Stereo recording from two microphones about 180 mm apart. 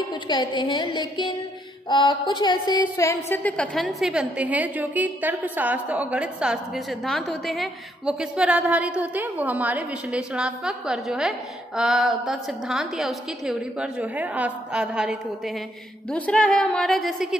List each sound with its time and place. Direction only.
0.1 s a woman's voice: 25° left (ahead or behind); by 17.4 s centre (ahead or behind)